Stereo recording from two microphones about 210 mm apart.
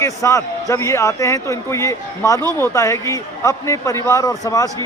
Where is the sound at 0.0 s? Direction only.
15° left (ahead or behind).